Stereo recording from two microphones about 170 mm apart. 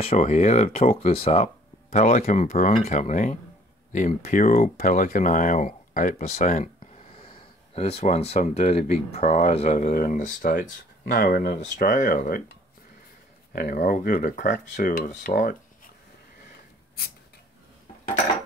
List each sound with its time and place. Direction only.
0.0 s speech: 40° left (ahead or behind)
6.8 s speech: 35° left (ahead or behind); by 10.6 s 50° left (ahead or behind)
11.1 s speech: 60° left (ahead or behind)